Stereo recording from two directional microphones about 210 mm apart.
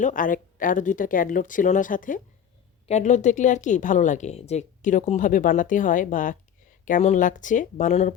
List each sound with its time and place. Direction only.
0.0 s speech: 40° left (ahead or behind)